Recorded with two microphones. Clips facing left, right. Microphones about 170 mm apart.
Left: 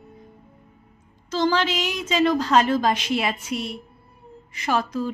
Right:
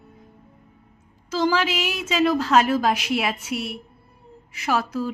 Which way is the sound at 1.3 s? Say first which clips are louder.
Even; 10° right (ahead or behind).